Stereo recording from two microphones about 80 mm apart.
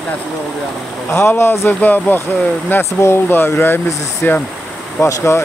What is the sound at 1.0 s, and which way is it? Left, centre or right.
Speech, left.